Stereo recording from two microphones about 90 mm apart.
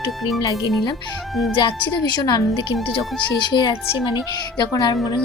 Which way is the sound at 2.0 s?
50° left (ahead or behind).